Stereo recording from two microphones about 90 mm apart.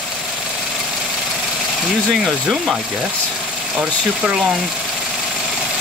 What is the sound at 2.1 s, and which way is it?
Speech, centre (ahead or behind).